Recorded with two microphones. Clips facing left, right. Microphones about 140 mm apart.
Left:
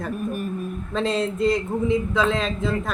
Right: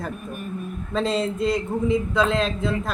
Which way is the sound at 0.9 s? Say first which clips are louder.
Even; centre (ahead or behind).